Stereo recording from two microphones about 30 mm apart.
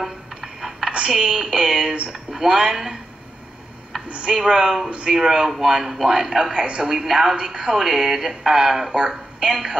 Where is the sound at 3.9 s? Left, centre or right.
Centre.